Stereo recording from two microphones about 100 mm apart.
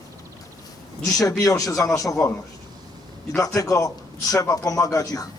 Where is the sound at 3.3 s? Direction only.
35° left (ahead or behind).